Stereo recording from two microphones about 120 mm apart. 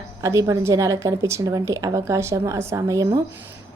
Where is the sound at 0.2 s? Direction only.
25° right (ahead or behind).